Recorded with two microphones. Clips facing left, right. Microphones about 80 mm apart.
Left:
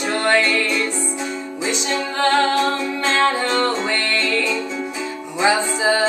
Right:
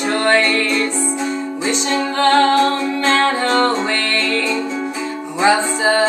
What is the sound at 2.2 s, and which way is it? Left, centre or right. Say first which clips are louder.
Music: right 4 dB; centre.